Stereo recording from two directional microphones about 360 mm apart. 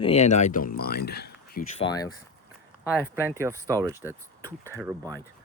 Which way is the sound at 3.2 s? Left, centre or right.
Centre.